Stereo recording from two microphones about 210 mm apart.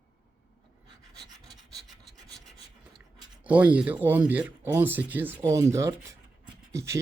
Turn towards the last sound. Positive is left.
turn(degrees=-15)  # may be behind; listen again after turning